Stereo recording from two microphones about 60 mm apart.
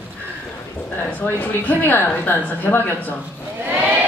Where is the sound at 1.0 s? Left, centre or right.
Left.